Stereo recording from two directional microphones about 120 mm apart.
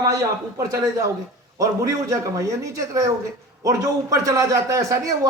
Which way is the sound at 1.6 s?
25° right (ahead or behind).